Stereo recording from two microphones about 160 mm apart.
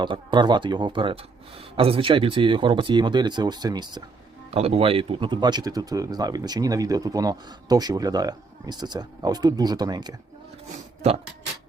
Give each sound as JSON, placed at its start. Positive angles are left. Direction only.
{"t": 0.0, "sound": "speech", "side_deg": -30}
{"t": 4.5, "sound": "speech", "side_deg": -40}